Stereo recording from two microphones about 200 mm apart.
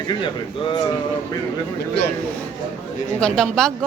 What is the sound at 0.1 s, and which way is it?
Speech, 25° left (ahead or behind).